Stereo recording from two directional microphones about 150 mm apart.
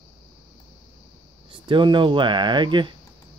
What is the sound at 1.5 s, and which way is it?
Speech, 30° right (ahead or behind).